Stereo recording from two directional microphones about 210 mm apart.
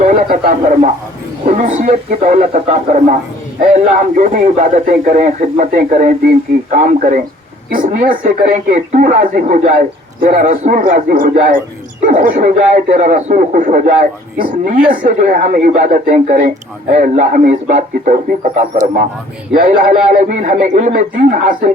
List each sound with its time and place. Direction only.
0.0 s speech: 40° right (ahead or behind)